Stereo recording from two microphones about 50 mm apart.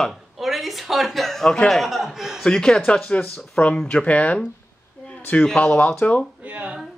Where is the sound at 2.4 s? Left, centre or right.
Centre.